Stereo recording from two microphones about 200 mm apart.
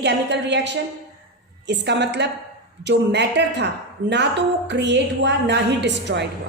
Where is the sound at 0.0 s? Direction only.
60° right (ahead or behind).